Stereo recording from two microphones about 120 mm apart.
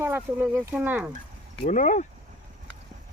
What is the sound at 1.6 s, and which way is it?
Speech, 90° left.